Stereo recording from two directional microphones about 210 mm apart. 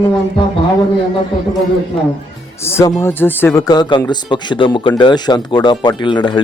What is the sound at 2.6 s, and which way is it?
Speech, 10° left (ahead or behind).